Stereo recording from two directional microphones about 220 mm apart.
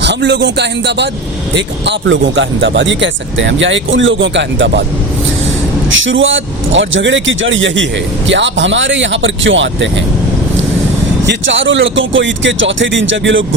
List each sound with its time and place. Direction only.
0.0 s a man's voice: 50° right (ahead or behind)
5.9 s speech: 60° right (ahead or behind)
11.3 s speech: 55° right (ahead or behind)